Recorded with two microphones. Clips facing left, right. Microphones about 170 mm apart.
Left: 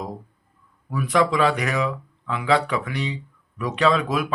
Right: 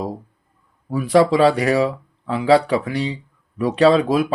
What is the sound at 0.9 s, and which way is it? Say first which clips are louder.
Speech: right 6 dB; 35° right (ahead or behind).